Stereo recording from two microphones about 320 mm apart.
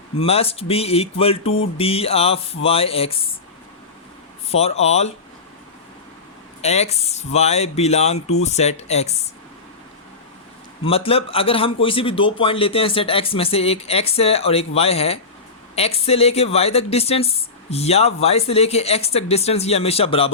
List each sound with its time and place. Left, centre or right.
0.2 s a man's voice: centre
4.5 s speech: centre
6.6 s speech: centre
10.8 s a man's voice: centre